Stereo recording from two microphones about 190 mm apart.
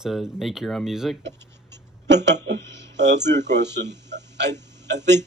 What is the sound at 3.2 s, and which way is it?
Speech, 65° right (ahead or behind).